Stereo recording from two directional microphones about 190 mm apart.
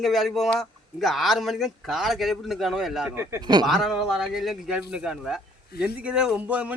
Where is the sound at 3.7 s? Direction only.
Centre (ahead or behind).